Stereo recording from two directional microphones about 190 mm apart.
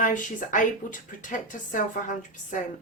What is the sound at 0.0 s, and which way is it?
Speech, 45° left (ahead or behind).